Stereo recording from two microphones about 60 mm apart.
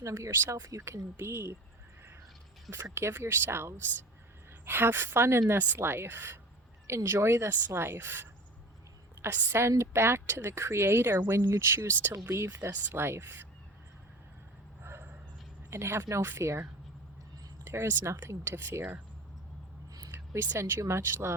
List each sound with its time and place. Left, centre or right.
0.0 s speech: right
0.9 s a woman's voice: right
2.9 s a woman's voice: right
15.7 s a woman's voice: right
17.7 s a woman's voice: right
20.1 s a sound: right
20.6 s a woman's voice: right